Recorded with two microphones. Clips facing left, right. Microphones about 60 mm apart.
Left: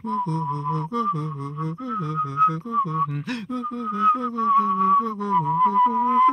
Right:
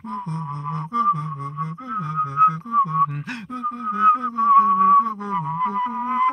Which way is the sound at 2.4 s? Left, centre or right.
Right.